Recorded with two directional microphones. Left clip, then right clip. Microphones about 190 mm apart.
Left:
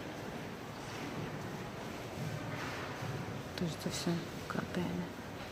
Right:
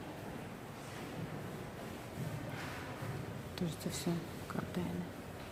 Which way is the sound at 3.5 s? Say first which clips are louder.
Left 2 dB; centre (ahead or behind).